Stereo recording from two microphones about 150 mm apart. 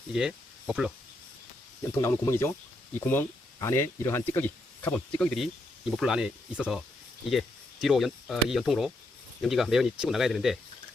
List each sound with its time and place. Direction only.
0.1 s speech: 5° right (ahead or behind)
2.0 s speech: 15° left (ahead or behind); by 10.6 s centre (ahead or behind)